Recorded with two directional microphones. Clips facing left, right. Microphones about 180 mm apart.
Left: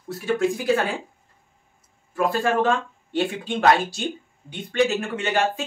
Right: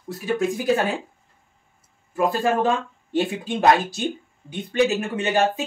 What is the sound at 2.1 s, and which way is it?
Speech, 20° right (ahead or behind).